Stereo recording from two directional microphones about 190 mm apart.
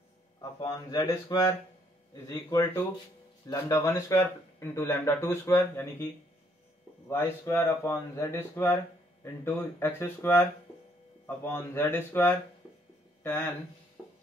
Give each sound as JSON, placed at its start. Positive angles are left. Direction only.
{"t": 0.4, "sound": "speech", "side_deg": 20}
{"t": 7.1, "sound": "speech", "side_deg": 15}